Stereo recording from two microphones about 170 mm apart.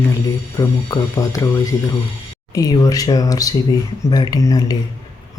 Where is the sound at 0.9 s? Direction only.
20° left (ahead or behind).